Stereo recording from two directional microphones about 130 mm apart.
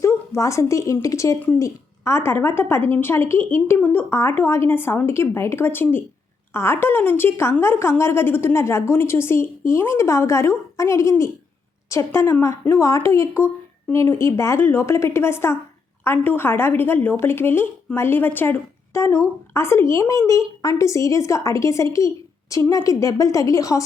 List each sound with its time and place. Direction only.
0.0 s a woman's voice: 20° left (ahead or behind)